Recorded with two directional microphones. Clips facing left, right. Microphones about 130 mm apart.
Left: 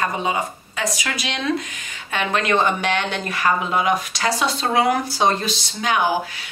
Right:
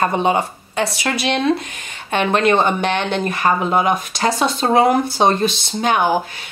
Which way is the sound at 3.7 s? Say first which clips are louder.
Right 3 dB; 45° right (ahead or behind).